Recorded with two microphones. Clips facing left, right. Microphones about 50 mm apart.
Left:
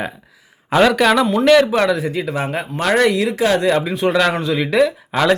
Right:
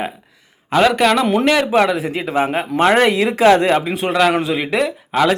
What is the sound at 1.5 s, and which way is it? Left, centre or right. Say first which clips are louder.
Speech: left 5 dB; centre.